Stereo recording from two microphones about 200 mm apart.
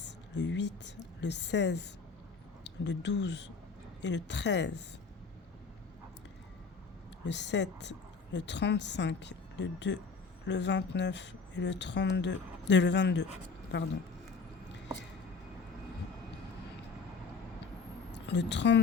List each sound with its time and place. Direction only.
0.0 s a woman's voice: 65° left (ahead or behind)
7.3 s speech: 60° left (ahead or behind)
18.1 s a woman's voice: 60° left (ahead or behind)